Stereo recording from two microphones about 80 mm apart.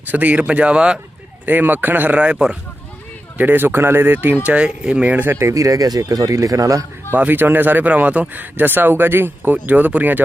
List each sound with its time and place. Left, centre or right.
0.1 s speech: centre
3.3 s speech: right
7.2 s speech: right